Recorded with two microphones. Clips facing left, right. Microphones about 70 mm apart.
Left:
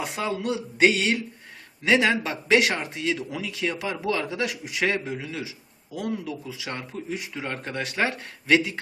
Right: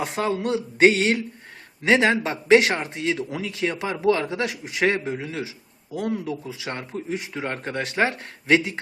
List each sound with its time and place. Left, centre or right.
0.0 s speech: right